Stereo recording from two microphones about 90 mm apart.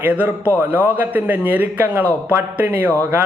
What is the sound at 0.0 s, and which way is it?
A man's voice, 15° right (ahead or behind).